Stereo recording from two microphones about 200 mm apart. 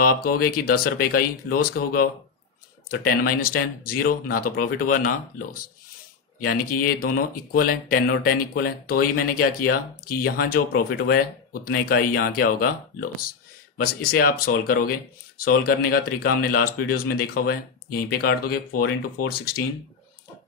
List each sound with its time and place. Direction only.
0.0 s speech: 45° left (ahead or behind)